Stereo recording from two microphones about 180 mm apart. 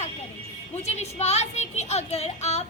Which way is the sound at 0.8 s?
35° left (ahead or behind).